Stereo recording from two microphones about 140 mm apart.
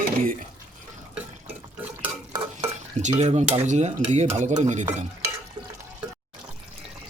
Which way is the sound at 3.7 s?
55° right (ahead or behind).